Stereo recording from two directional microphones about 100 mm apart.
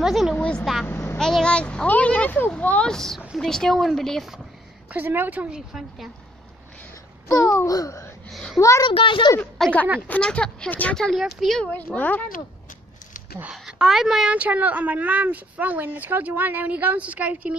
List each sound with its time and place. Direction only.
0.0 s a woman's voice: centre (ahead or behind)
0.4 s vehicle: 10° left (ahead or behind)
0.8 s vehicle: 20° left (ahead or behind)
1.1 s speech: 5° left (ahead or behind)
4.9 s a woman's voice: 20° right (ahead or behind)
5.7 s speech: 5° right (ahead or behind)
7.2 s a child's voice: 30° left (ahead or behind)
8.3 s a child's voice: centre (ahead or behind)
8.5 s a child's voice: 30° left (ahead or behind)
8.9 s speech: 55° left (ahead or behind)
9.6 s speech: 5° left (ahead or behind)
11.7 s speech: 15° left (ahead or behind)
13.4 s a woman's voice: 10° right (ahead or behind)